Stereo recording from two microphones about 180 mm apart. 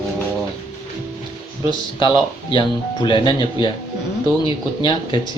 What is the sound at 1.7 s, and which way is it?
Speech, 25° left (ahead or behind).